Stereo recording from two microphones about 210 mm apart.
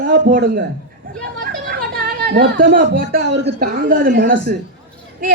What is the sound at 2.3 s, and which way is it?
Speech, 45° right (ahead or behind).